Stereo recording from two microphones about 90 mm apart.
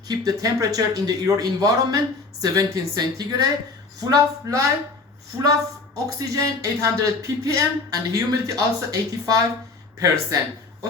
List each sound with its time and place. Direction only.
0.1 s a woman's voice: 40° right (ahead or behind)
6.1 s speech: 35° right (ahead or behind)